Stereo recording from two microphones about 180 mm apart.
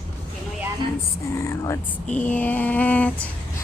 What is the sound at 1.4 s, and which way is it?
A woman's voice, 15° left (ahead or behind).